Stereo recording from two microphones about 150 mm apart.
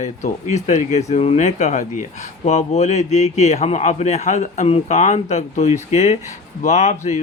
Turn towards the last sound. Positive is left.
turn(degrees=50)  # may be behind; listen again after turning